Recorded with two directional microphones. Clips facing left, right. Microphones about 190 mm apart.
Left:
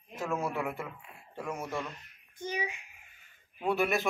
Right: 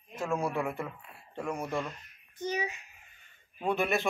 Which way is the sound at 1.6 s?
15° right (ahead or behind).